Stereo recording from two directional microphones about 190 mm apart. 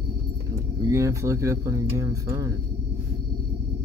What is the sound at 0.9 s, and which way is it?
Speech, 15° right (ahead or behind).